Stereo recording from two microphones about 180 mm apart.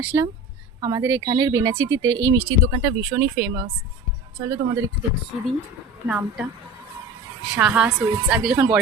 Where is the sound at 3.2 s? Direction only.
60° right (ahead or behind).